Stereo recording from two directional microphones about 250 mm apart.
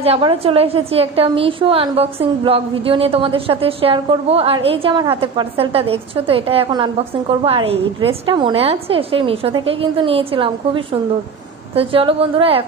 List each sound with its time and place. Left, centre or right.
0.0 s a woman's voice: right